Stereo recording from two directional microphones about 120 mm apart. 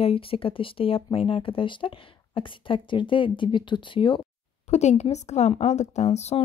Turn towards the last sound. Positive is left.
turn(degrees=65)  # may be behind; listen again after turning